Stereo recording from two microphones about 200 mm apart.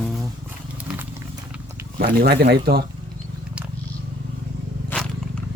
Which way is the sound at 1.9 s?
55° right (ahead or behind).